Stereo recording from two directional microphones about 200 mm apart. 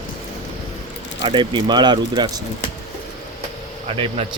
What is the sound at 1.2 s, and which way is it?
Speech, 25° right (ahead or behind).